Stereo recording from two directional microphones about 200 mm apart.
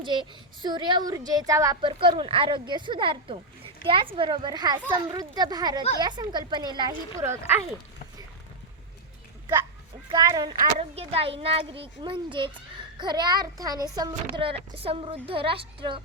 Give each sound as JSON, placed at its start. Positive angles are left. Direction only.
{"t": 0.0, "sound": "a child's voice", "side_deg": -25}
{"t": 10.1, "sound": "a child's voice", "side_deg": -20}